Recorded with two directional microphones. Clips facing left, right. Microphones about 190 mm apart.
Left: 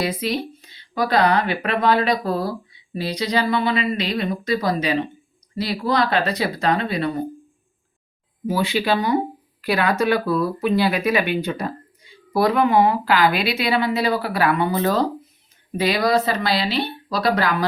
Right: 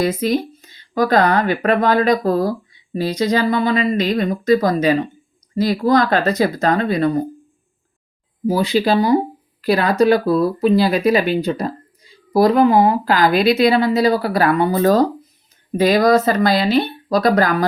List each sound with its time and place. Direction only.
0.0 s speech: 45° right (ahead or behind)
8.4 s speech: 35° right (ahead or behind)